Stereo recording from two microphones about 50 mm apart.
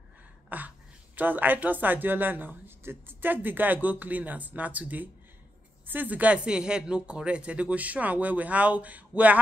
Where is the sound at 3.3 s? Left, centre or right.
Right.